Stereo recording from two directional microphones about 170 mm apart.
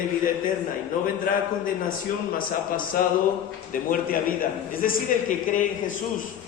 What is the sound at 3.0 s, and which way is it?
A woman's voice, 55° left (ahead or behind).